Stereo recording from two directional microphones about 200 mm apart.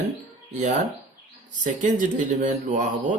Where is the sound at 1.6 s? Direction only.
40° right (ahead or behind).